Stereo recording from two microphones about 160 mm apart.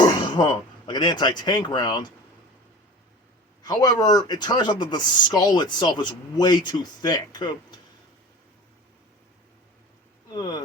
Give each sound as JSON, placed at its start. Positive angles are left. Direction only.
{"t": 0.0, "sound": "speech", "side_deg": 30}
{"t": 3.7, "sound": "speech", "side_deg": 25}
{"t": 10.3, "sound": "speech", "side_deg": 25}